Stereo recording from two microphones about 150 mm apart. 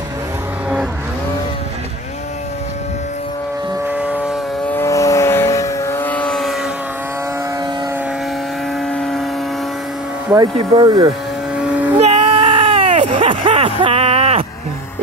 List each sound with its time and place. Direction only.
4.0 s vehicle: 5° right (ahead or behind)
4.7 s vehicle: 20° left (ahead or behind); by 6.7 s centre (ahead or behind)
8.8 s vehicle: 5° left (ahead or behind)
10.7 s speech: 30° right (ahead or behind)
12.0 s baby cry: 45° right (ahead or behind)
13.2 s a sound: 35° right (ahead or behind)